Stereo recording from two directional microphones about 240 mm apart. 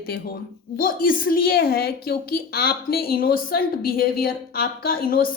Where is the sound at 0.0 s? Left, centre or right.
Left.